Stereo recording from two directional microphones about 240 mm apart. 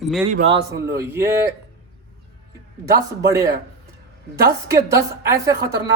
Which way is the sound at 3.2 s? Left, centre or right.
Centre.